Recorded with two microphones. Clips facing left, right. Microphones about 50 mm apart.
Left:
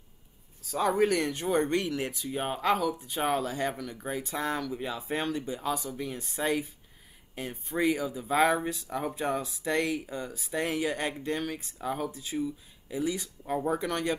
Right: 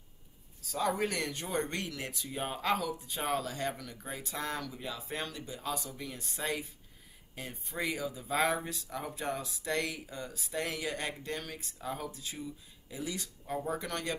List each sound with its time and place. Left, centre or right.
0.7 s speech: centre
8.8 s speech: left
10.5 s speech: left
13.5 s speech: left